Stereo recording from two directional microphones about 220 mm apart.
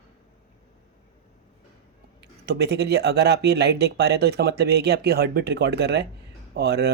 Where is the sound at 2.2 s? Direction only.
50° right (ahead or behind).